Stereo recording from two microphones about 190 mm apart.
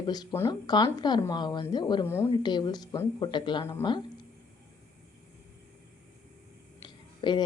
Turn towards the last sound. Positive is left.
turn(degrees=25)  # may be behind; listen again after turning